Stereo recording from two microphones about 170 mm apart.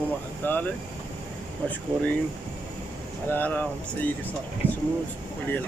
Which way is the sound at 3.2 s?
10° left (ahead or behind).